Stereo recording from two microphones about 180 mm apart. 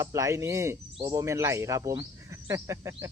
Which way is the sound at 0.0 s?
15° right (ahead or behind).